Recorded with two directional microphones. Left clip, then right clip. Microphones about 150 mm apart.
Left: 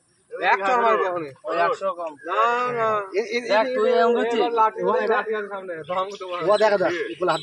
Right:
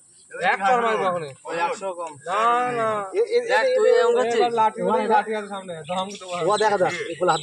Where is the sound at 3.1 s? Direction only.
50° left (ahead or behind).